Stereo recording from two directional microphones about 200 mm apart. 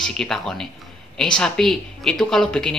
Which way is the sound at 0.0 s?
5° left (ahead or behind).